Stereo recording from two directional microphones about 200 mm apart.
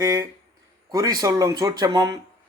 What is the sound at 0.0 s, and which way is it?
Speech, 15° right (ahead or behind).